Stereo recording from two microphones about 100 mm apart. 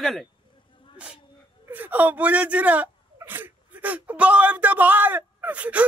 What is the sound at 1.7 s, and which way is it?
A woman's voice, 20° right (ahead or behind).